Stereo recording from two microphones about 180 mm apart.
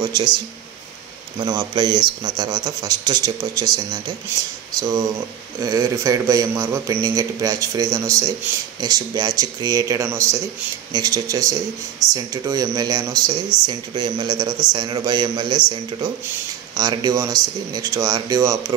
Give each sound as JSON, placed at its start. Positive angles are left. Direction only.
{"t": 0.0, "sound": "a man's voice", "side_deg": -25}
{"t": 1.4, "sound": "a man's voice", "side_deg": -20}
{"t": 16.7, "sound": "a man's voice", "side_deg": -25}